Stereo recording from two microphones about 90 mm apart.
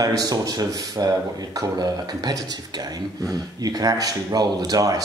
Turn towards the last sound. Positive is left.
turn(degrees=-45)  # may be behind; listen again after turning